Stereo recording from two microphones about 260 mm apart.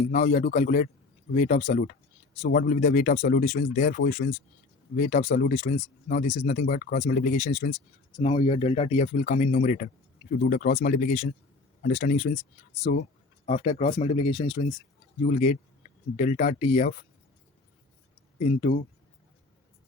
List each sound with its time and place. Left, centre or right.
0.1 s speech: left
15.2 s speech: left
18.3 s speech: left